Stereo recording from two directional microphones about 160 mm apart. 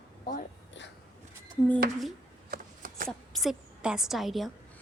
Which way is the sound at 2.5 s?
60° right (ahead or behind).